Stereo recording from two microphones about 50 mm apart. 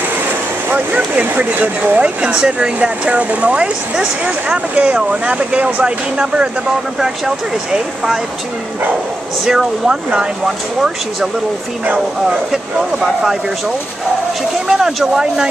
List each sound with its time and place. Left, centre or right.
0.7 s speech: right
7.0 s speech: centre
9.5 s speech: centre
13.0 s speech: centre
14.7 s speech: centre